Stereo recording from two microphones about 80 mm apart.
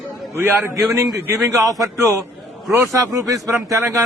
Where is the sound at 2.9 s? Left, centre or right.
Right.